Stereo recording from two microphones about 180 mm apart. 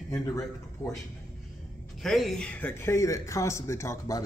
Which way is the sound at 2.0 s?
Centre (ahead or behind).